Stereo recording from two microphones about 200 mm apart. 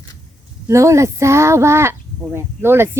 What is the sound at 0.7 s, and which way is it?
Speech, 15° right (ahead or behind).